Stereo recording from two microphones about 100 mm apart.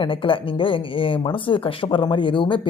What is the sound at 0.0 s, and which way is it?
Speech, 60° left (ahead or behind).